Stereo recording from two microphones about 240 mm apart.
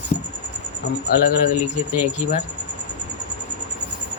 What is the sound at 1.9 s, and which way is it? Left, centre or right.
Speech, left.